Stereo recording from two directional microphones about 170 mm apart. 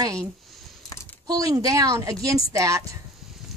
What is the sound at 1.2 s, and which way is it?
A woman's voice, 20° right (ahead or behind).